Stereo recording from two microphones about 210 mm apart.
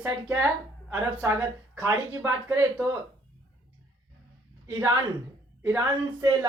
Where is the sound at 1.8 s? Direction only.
10° right (ahead or behind).